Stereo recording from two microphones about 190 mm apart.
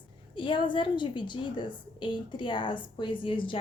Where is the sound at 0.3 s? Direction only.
25° left (ahead or behind).